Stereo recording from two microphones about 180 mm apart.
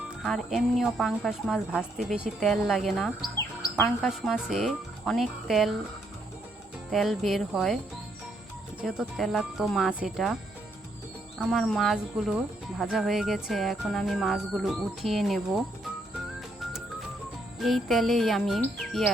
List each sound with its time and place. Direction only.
0.2 s speech: centre (ahead or behind)
3.2 s chirp: 15° left (ahead or behind)
4.0 s speech: centre (ahead or behind)
6.9 s speech: centre (ahead or behind)
8.9 s speech: centre (ahead or behind)
11.3 s speech: centre (ahead or behind)
17.6 s speech: centre (ahead or behind)